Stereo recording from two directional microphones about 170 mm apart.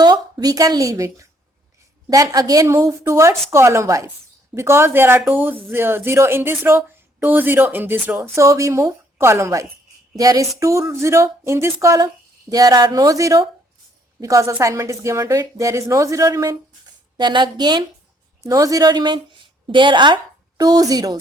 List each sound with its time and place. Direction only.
0.0 s a woman's voice: 25° right (ahead or behind)